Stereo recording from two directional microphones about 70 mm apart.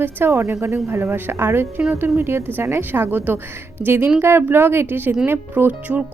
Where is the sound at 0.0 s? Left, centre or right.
Right.